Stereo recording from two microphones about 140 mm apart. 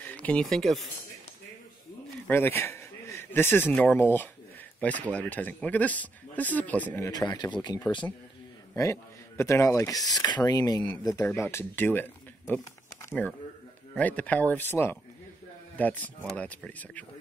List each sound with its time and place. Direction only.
0.0 s speech: 10° left (ahead or behind)
2.2 s speech: 15° left (ahead or behind)
7.1 s speech: 30° left (ahead or behind)
8.7 s speech: 20° left (ahead or behind)
13.9 s speech: 10° left (ahead or behind)